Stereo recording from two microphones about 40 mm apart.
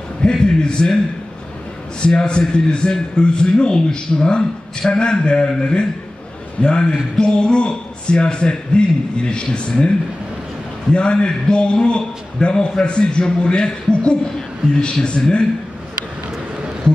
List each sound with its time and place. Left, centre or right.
0.2 s a man's voice: left
2.0 s a man's voice: left
10.9 s a man's voice: left